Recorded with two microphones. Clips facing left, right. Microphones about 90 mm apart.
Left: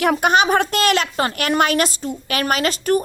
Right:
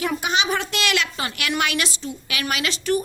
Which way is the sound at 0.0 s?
60° left (ahead or behind).